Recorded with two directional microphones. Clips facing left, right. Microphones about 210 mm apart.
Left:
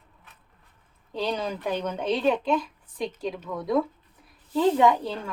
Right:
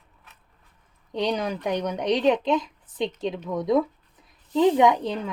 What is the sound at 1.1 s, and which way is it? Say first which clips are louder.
A woman's voice: right 3 dB; 15° right (ahead or behind).